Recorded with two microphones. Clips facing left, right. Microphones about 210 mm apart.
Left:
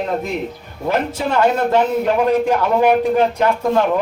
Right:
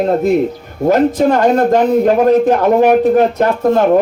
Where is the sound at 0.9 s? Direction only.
45° right (ahead or behind).